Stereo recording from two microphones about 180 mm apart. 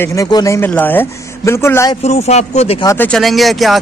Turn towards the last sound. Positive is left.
turn(degrees=0)  # may be behind; listen again after turning